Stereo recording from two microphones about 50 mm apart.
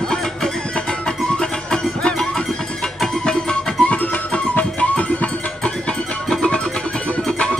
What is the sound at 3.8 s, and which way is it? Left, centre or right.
Music, left.